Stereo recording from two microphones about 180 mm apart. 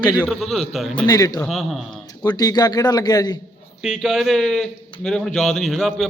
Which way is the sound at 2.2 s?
20° left (ahead or behind).